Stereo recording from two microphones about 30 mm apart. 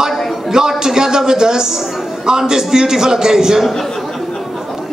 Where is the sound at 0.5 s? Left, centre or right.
Centre.